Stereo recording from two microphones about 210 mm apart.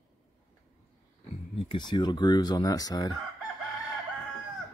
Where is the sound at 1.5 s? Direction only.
25° left (ahead or behind).